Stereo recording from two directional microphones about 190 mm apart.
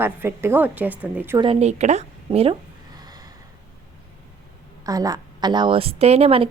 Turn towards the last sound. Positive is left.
turn(degrees=-30)  # may be behind; listen again after turning